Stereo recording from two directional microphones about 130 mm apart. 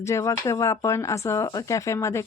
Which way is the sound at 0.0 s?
25° left (ahead or behind).